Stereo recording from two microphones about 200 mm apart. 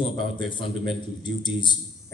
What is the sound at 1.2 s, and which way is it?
Speech, 20° left (ahead or behind).